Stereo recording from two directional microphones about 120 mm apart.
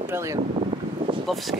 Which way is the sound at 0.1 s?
25° right (ahead or behind).